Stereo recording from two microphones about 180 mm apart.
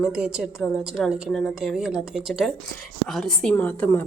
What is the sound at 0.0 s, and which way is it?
A woman's voice, 5° right (ahead or behind).